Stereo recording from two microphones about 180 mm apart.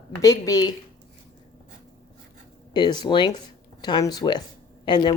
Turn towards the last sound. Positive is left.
turn(degrees=25)  # may be behind; listen again after turning